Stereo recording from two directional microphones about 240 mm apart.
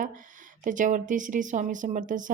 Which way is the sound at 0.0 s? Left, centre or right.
Right.